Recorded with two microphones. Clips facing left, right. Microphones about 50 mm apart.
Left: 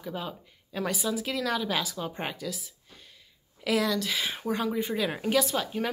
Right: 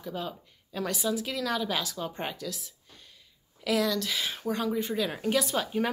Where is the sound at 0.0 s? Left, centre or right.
Centre.